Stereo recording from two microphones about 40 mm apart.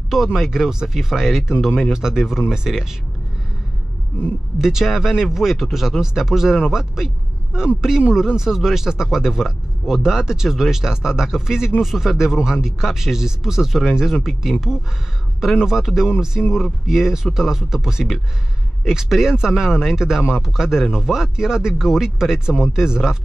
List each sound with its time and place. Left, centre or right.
0.3 s speech: centre
4.6 s speech: centre